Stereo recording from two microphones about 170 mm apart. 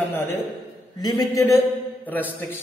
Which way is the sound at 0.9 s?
20° left (ahead or behind).